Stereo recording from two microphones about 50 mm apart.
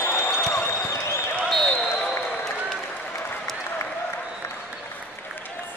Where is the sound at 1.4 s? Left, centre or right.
Centre.